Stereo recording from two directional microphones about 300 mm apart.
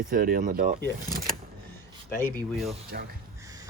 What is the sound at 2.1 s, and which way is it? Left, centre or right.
Speech, centre.